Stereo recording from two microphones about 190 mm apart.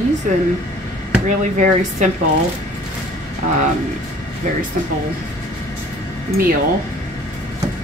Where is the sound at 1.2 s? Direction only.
40° right (ahead or behind).